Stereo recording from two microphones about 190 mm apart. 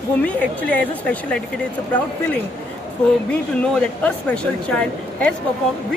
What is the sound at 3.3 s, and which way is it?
Speech, 5° left (ahead or behind).